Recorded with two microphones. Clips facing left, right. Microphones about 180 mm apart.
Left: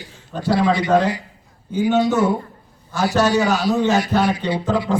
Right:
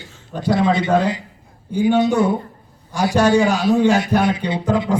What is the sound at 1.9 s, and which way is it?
A man's voice, 15° right (ahead or behind).